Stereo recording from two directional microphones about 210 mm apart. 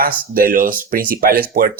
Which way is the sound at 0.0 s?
45° right (ahead or behind).